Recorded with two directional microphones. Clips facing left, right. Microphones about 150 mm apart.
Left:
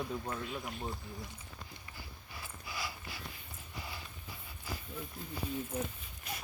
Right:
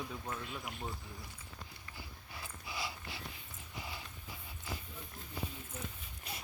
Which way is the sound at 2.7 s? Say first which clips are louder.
Even; 25° right (ahead or behind).